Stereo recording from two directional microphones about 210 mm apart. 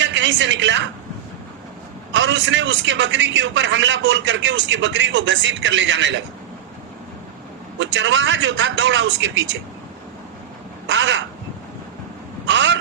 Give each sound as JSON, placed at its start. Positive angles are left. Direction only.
{"t": 0.0, "sound": "a woman's voice", "side_deg": -60}
{"t": 2.1, "sound": "a man's voice", "side_deg": -60}
{"t": 7.8, "sound": "a man's voice", "side_deg": -60}
{"t": 10.8, "sound": "crow", "side_deg": -60}
{"t": 12.5, "sound": "a sound", "side_deg": -60}